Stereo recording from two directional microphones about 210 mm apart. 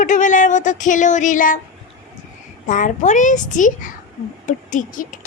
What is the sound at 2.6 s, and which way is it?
A child's voice, 35° left (ahead or behind).